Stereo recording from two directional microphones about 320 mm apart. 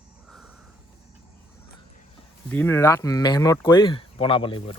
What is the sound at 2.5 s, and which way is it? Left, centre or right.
Speech, centre.